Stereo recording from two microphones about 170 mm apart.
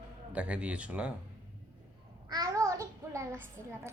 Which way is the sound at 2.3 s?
20° right (ahead or behind).